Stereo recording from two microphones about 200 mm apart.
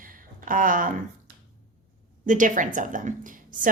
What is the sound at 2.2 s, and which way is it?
A woman's voice, 40° right (ahead or behind).